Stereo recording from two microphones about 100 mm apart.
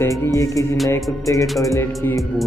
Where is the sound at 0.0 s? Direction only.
30° left (ahead or behind).